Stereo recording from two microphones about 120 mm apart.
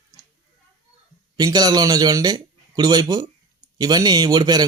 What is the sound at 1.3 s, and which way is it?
Speech, 35° right (ahead or behind).